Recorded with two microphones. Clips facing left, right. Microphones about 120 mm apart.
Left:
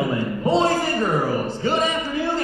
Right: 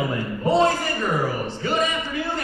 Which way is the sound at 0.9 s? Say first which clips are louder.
Left 3 dB; 35° left (ahead or behind).